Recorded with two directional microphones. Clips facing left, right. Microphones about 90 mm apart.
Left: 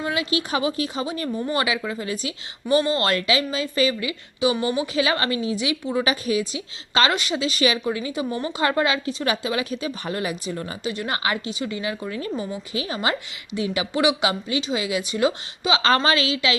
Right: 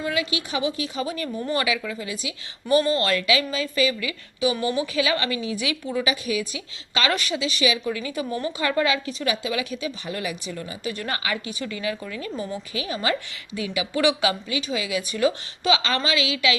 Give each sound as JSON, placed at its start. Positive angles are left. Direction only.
{"t": 0.0, "sound": "a woman's voice", "side_deg": 30}
{"t": 2.6, "sound": "a woman's voice", "side_deg": 30}
{"t": 6.0, "sound": "a woman's voice", "side_deg": 35}
{"t": 7.3, "sound": "a woman's voice", "side_deg": 40}
{"t": 7.9, "sound": "a woman's voice", "side_deg": 25}
{"t": 10.9, "sound": "speech", "side_deg": 20}
{"t": 11.2, "sound": "a woman's voice", "side_deg": 30}
{"t": 12.3, "sound": "speech", "side_deg": 15}
{"t": 12.7, "sound": "a woman's voice", "side_deg": 30}
{"t": 15.8, "sound": "a woman's voice", "side_deg": 40}